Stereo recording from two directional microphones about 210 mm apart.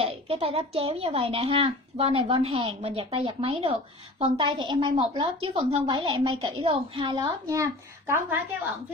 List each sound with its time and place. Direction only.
0.0 s speech: 25° right (ahead or behind)